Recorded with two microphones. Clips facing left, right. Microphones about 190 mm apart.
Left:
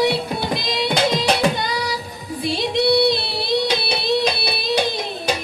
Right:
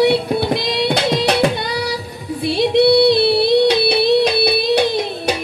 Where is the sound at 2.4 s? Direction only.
60° right (ahead or behind).